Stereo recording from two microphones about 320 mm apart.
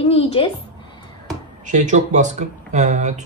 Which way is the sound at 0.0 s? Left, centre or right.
Centre.